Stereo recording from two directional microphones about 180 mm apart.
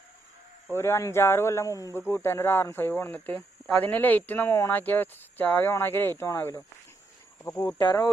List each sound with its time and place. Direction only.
0.7 s a man's voice: 15° left (ahead or behind)